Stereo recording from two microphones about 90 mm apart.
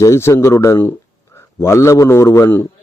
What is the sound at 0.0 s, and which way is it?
A man's voice, 30° left (ahead or behind).